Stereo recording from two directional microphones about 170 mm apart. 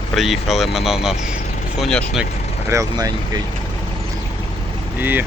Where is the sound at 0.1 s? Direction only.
Centre (ahead or behind).